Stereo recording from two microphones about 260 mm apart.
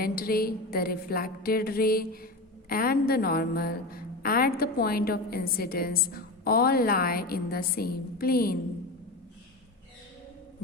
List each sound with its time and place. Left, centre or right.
0.0 s a woman's voice: left